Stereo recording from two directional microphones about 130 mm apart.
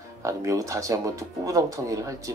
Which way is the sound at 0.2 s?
25° right (ahead or behind).